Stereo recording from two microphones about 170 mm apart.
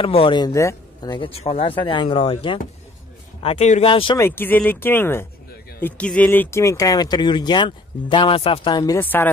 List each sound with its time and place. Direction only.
0.0 s speech: 30° left (ahead or behind)
3.4 s speech: 40° left (ahead or behind)
4.2 s speech: 10° left (ahead or behind)